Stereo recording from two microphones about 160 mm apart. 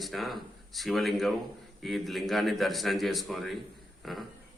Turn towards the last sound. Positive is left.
turn(degrees=0)  # may be behind; listen again after turning